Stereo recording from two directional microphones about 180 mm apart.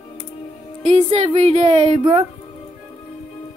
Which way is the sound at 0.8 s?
35° right (ahead or behind).